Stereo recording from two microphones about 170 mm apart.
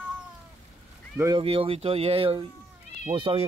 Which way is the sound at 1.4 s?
35° right (ahead or behind).